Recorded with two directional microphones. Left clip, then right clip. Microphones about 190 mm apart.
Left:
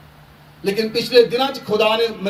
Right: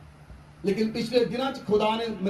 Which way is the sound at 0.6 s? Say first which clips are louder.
Left 7 dB; 35° left (ahead or behind).